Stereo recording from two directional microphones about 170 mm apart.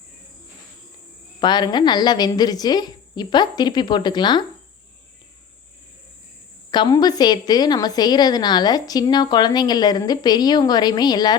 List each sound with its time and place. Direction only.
1.4 s a woman's voice: 25° left (ahead or behind)
6.7 s a woman's voice: 25° left (ahead or behind)